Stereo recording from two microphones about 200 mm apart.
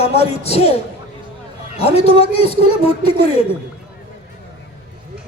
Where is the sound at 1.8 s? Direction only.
30° left (ahead or behind).